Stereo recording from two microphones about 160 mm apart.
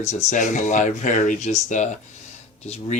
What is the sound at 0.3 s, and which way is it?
Speech, 50° left (ahead or behind).